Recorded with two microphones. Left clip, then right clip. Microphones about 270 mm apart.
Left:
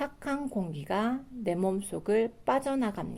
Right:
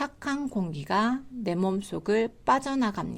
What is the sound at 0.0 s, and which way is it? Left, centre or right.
A woman's voice, right.